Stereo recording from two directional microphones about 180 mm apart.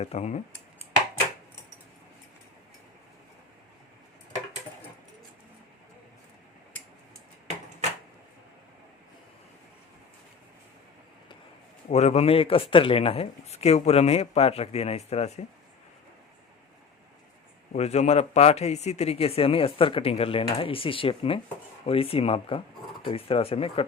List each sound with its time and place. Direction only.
0.0 s speech: 35° left (ahead or behind)
11.9 s speech: 35° left (ahead or behind)
17.7 s speech: 35° left (ahead or behind)